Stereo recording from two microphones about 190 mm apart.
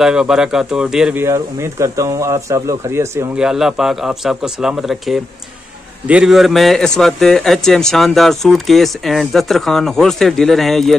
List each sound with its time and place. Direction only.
0.0 s a man's voice: 5° right (ahead or behind)
1.2 s speech: 15° right (ahead or behind)
3.4 s a man's voice: centre (ahead or behind)